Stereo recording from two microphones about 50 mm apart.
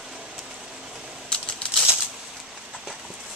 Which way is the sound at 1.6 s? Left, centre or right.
Left.